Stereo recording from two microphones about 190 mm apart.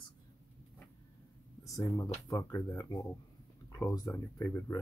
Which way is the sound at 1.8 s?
20° left (ahead or behind).